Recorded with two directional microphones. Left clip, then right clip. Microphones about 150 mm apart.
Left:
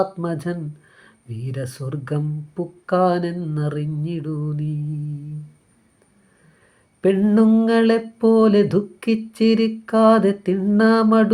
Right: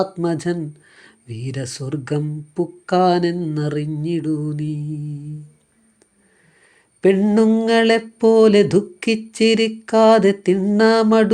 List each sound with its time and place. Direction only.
0.0 s speech: 35° right (ahead or behind)
7.0 s speech: 30° right (ahead or behind)